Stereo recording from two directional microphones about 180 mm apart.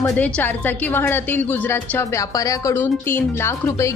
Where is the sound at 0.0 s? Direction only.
10° left (ahead or behind).